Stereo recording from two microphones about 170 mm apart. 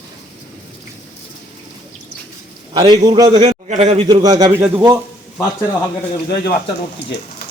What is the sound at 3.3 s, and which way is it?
Speech, 40° right (ahead or behind).